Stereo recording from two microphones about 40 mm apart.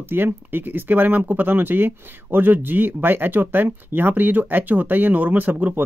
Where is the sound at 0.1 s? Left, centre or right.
Right.